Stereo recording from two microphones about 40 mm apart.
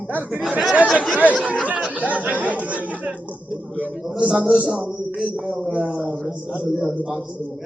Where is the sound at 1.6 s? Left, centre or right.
Right.